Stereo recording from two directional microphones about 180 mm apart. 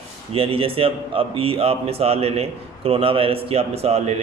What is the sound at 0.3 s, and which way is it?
A man's voice, 30° right (ahead or behind).